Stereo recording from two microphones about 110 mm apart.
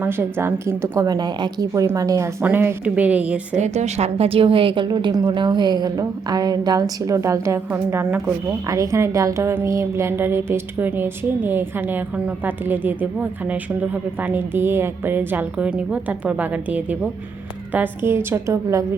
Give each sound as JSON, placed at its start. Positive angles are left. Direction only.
{"t": 0.0, "sound": "a woman's voice", "side_deg": -20}
{"t": 2.4, "sound": "a woman's voice", "side_deg": -20}
{"t": 3.5, "sound": "a woman's voice", "side_deg": -90}
{"t": 8.7, "sound": "a woman's voice", "side_deg": -30}